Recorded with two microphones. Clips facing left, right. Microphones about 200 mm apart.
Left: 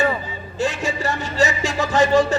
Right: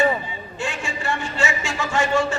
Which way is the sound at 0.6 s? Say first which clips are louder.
Left 6 dB; 40° left (ahead or behind).